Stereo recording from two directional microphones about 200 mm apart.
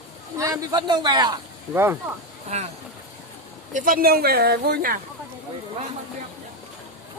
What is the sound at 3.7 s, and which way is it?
Speech, 45° right (ahead or behind).